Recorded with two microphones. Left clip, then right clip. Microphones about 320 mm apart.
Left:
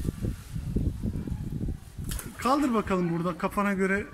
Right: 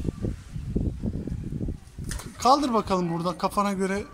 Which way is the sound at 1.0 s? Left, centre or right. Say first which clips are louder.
Right 3 dB; right.